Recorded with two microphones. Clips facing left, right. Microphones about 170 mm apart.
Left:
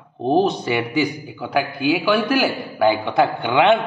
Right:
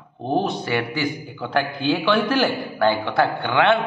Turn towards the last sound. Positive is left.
turn(degrees=15)  # may be behind; listen again after turning